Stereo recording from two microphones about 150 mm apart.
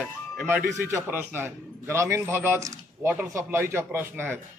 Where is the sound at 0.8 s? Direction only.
15° right (ahead or behind).